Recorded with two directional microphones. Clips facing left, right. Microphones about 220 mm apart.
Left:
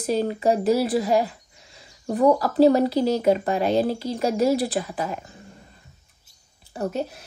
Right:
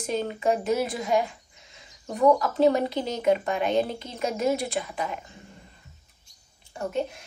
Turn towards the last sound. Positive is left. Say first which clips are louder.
# left 2 dB
turn(degrees=40)  # may be behind; listen again after turning